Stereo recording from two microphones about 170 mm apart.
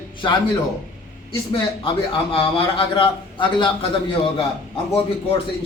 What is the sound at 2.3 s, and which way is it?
A man's voice, 30° left (ahead or behind).